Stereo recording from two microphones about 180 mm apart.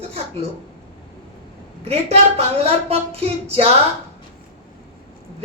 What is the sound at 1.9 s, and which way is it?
A woman's voice, 35° right (ahead or behind).